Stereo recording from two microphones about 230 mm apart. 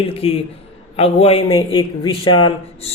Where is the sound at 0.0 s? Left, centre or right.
Left.